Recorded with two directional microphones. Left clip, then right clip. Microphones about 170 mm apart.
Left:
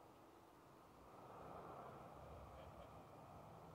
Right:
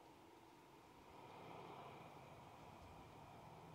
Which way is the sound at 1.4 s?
25° right (ahead or behind).